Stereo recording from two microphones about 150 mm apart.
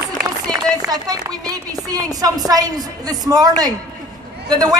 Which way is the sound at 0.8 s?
25° right (ahead or behind).